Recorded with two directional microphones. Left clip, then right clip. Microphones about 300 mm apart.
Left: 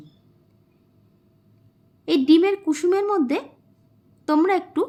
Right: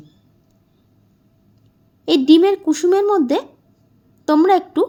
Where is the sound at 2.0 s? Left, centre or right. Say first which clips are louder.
Right 5 dB; centre.